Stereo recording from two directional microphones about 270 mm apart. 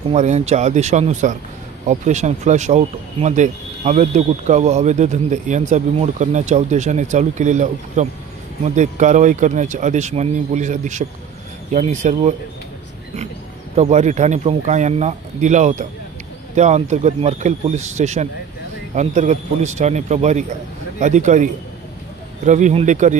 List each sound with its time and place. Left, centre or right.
0.1 s speech: right
13.7 s speech: right